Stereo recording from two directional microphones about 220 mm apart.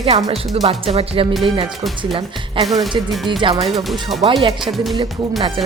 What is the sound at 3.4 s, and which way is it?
Speech, 20° right (ahead or behind).